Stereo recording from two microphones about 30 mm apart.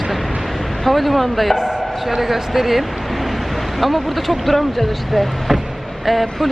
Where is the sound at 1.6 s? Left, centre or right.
Centre.